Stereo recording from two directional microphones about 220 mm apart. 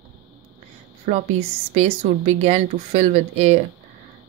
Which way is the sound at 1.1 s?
30° right (ahead or behind).